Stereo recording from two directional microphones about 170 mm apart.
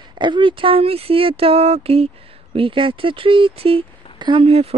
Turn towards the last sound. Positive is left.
turn(degrees=-35)  # may be behind; listen again after turning